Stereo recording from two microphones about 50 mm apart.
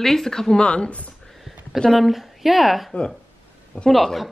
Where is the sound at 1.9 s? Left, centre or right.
Centre.